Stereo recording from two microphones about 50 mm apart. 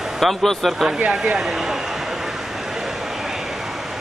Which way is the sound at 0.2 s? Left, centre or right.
Centre.